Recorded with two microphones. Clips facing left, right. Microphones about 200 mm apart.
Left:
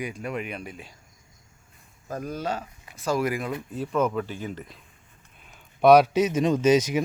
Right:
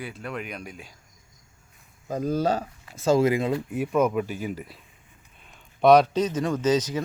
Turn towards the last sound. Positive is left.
turn(degrees=10)  # may be behind; listen again after turning